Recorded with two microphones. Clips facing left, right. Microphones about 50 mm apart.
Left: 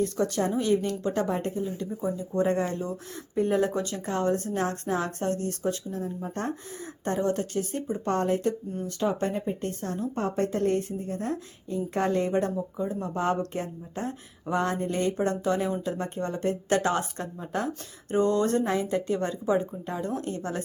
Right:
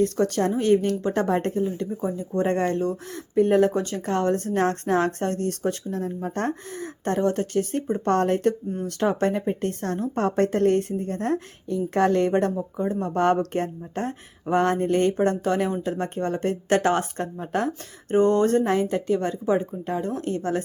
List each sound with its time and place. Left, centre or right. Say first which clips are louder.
0.0 s speech: right 4 dB; right
1.3 s speech: right 6 dB; right
1.6 s speech: right 5 dB; right
2.4 s speech: right 4 dB; right
3.8 s speech: right 4 dB; right
6.7 s speech: right 3 dB; right
8.0 s a woman's voice: right 5 dB; right
12.5 s speech: right 4 dB; right
18.1 s speech: right 5 dB; right